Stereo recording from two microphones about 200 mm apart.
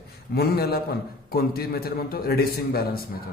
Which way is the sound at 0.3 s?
50° left (ahead or behind).